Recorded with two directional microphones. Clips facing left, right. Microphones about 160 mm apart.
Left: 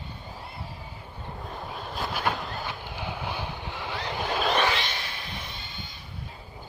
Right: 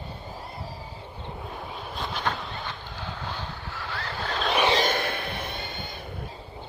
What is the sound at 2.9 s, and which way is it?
Vehicle, 10° left (ahead or behind).